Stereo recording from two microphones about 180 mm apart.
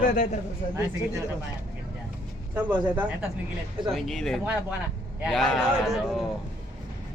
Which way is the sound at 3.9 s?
Centre (ahead or behind).